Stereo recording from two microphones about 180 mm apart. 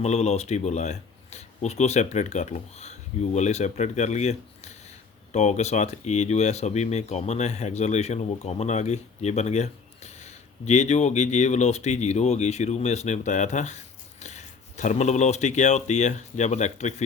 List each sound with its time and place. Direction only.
0.0 s speech: 40° left (ahead or behind)